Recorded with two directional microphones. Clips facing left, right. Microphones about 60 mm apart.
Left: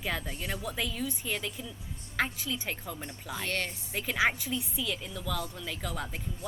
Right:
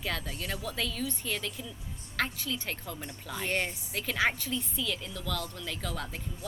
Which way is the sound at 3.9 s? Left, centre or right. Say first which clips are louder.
Left 2 dB; centre.